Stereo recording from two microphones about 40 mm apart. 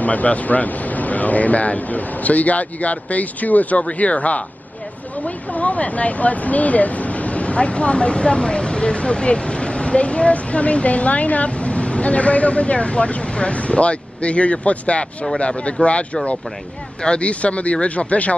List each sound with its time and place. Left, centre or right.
0.0 s speech: left